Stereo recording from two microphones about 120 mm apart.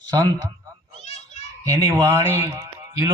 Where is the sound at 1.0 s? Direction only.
65° left (ahead or behind).